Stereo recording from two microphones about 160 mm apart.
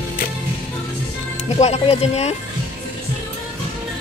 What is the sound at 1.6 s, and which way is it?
Speech, 40° left (ahead or behind).